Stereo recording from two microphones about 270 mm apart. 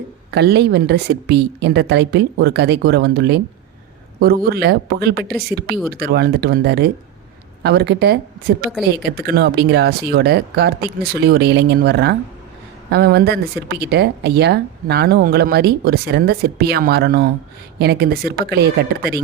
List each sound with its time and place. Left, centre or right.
0.3 s speech: right